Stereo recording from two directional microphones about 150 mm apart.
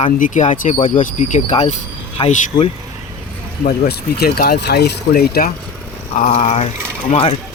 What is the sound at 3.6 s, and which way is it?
Speech, 85° left.